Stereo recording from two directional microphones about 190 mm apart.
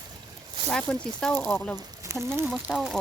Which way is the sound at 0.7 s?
5° left (ahead or behind).